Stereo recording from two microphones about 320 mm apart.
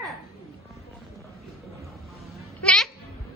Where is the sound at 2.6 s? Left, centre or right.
Centre.